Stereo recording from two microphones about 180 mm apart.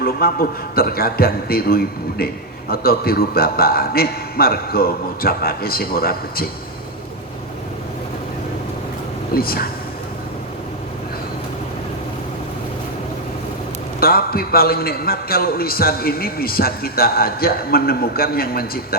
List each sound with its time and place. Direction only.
0.0 s a man's voice: 55° left (ahead or behind)
9.3 s a man's voice: 55° left (ahead or behind)
14.0 s a man's voice: 55° left (ahead or behind)